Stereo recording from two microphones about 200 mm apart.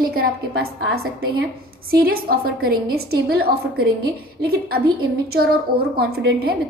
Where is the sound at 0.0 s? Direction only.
50° right (ahead or behind).